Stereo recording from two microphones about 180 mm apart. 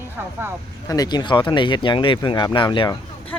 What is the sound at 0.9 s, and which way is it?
Speech, 20° left (ahead or behind).